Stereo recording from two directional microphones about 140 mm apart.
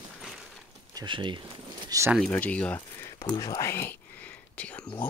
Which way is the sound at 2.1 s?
5° left (ahead or behind).